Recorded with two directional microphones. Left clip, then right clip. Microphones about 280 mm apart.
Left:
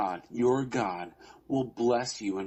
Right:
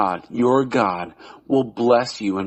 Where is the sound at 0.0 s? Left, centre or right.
Right.